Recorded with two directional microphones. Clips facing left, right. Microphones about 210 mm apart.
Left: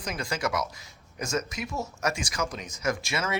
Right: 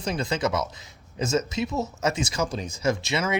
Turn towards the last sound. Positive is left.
turn(degrees=-25)  # may be behind; listen again after turning